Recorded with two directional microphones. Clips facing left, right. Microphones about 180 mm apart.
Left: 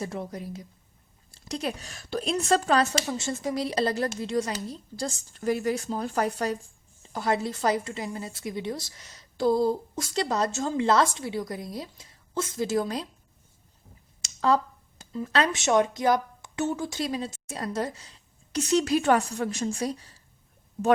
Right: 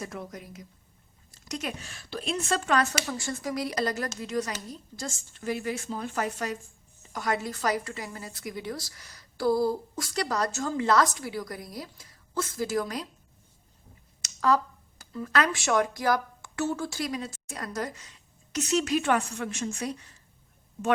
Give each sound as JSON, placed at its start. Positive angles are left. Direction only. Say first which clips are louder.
{"t": 0.0, "sound": "a woman's voice", "louder": "left 5 dB", "side_deg": 30}
{"t": 14.2, "sound": "speech", "louder": "left 1 dB", "side_deg": 25}
{"t": 17.0, "sound": "speech", "louder": "left 2 dB", "side_deg": 30}